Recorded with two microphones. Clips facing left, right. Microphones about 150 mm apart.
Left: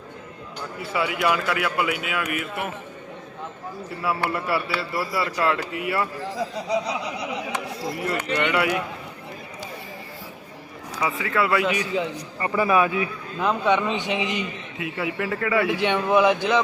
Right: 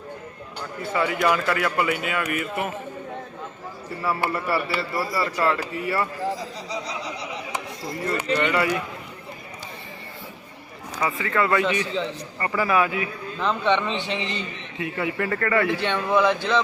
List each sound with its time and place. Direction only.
0.9 s a man's voice: 5° left (ahead or behind)
4.0 s a man's voice: centre (ahead or behind)
8.0 s a man's voice: centre (ahead or behind)
11.0 s a man's voice: 5° left (ahead or behind)